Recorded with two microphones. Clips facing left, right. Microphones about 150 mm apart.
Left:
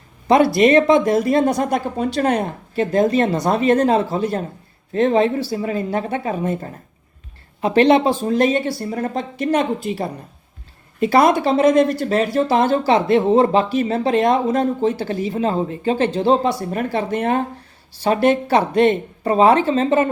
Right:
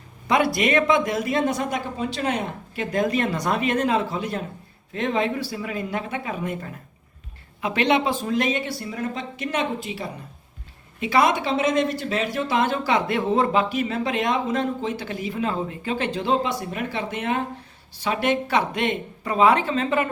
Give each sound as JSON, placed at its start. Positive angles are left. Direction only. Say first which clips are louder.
{"t": 0.3, "sound": "speech", "louder": "left 8 dB", "side_deg": 30}